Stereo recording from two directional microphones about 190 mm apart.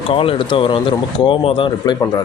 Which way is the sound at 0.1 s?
30° left (ahead or behind).